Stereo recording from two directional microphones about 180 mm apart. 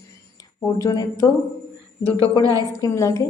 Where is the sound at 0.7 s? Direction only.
20° left (ahead or behind).